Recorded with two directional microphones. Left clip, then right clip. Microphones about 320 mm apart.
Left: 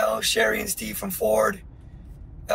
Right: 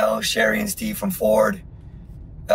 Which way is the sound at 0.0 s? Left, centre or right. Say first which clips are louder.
Right 2 dB; centre.